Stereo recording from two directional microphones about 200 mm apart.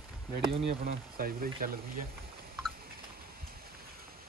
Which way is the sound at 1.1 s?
45° right (ahead or behind).